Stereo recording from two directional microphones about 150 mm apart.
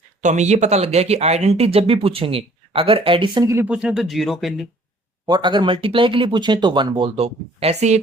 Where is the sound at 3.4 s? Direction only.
20° right (ahead or behind).